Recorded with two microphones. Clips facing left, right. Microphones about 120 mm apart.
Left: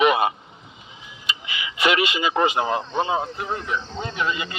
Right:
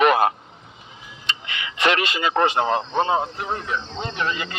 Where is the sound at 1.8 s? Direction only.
35° right (ahead or behind).